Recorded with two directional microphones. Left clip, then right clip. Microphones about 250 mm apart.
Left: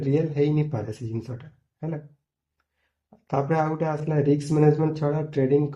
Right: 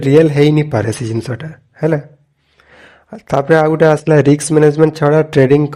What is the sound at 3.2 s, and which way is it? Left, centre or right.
Speech, right.